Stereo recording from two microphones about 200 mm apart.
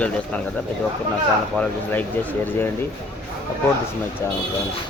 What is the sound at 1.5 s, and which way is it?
Speech, 5° left (ahead or behind).